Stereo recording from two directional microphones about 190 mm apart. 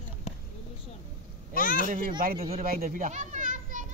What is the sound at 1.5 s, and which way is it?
Speech, 45° left (ahead or behind).